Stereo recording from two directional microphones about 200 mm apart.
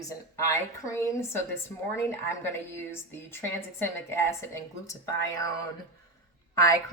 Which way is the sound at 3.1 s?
10° left (ahead or behind).